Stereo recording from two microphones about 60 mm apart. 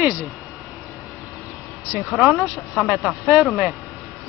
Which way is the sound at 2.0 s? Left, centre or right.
Centre.